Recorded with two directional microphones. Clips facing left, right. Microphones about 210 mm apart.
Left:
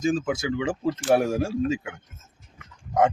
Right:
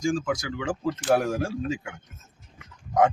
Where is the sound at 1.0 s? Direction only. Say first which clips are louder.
Left 2 dB; 5° left (ahead or behind).